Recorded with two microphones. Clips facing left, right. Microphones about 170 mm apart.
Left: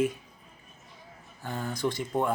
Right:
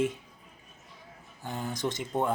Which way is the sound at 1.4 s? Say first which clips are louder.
Left 2 dB; 15° right (ahead or behind).